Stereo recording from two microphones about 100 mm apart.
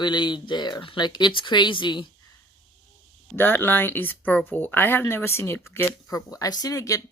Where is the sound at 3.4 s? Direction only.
20° left (ahead or behind).